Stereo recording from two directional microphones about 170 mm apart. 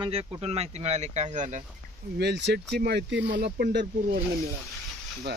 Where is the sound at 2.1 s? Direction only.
80° right.